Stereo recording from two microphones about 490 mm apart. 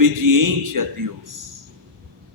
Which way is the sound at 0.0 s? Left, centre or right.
Right.